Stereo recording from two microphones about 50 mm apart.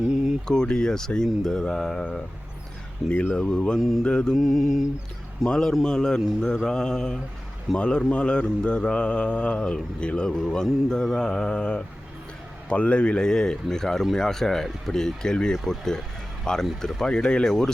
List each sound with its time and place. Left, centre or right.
0.4 s speech: centre
3.0 s mantra: centre
3.3 s speech: centre
3.8 s mantra: centre
4.0 s speech: centre
4.4 s mantra: centre
5.5 s speech: centre
7.8 s mantra: left
10.8 s speech: centre